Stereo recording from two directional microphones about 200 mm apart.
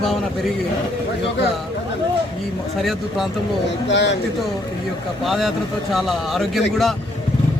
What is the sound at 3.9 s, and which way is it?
Speech, 60° left (ahead or behind).